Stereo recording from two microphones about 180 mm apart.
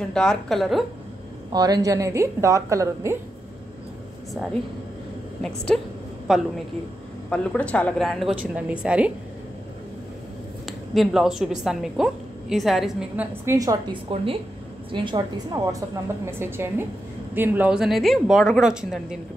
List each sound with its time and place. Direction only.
0.1 s a woman's voice: 5° left (ahead or behind)
1.5 s a woman's voice: 20° right (ahead or behind)
5.7 s a woman's voice: 5° left (ahead or behind)
11.0 s a woman's voice: centre (ahead or behind)
14.1 s a woman's voice: 30° right (ahead or behind); by 19.1 s 5° right (ahead or behind)